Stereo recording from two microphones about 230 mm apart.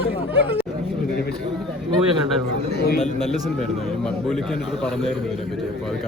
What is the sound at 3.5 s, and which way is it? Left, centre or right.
A man's voice, centre.